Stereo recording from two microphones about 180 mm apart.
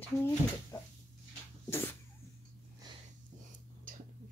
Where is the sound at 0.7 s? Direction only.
15° left (ahead or behind).